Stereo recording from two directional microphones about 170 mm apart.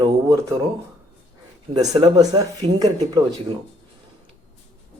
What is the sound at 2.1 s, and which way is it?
Speech, 25° right (ahead or behind).